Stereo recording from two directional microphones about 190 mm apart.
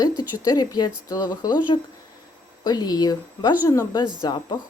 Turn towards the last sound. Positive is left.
turn(degrees=25)  # may be behind; listen again after turning